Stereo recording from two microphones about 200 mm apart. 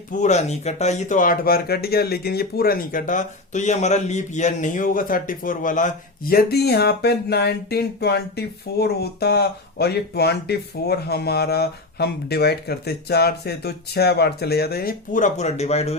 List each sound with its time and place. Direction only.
0.1 s speech: 35° left (ahead or behind)